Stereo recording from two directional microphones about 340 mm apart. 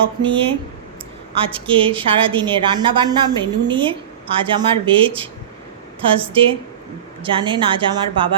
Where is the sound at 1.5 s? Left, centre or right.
Centre.